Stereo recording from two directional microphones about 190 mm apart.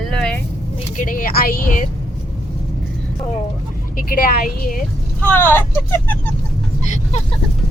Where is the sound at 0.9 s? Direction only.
45° left (ahead or behind).